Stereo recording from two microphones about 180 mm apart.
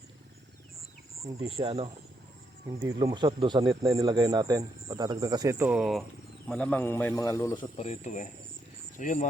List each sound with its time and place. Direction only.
1.5 s speech: 35° right (ahead or behind)
3.0 s a man's voice: 25° right (ahead or behind); by 7.6 s 20° left (ahead or behind)
7.6 s speech: 35° left (ahead or behind)